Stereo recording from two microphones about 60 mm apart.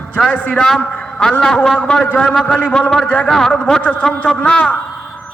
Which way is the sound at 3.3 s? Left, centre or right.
Centre.